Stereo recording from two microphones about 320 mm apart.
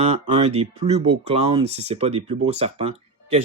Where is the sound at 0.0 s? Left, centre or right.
Centre.